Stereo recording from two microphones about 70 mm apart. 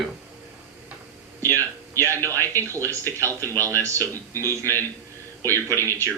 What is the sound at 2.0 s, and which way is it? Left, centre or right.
Speech, right.